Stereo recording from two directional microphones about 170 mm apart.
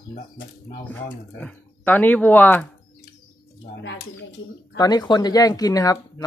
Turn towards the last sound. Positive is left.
turn(degrees=20)  # may be behind; listen again after turning